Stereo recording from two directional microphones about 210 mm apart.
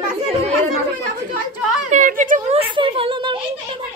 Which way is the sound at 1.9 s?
40° right (ahead or behind).